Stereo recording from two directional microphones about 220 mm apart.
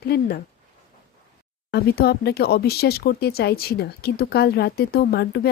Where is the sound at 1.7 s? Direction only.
45° left (ahead or behind).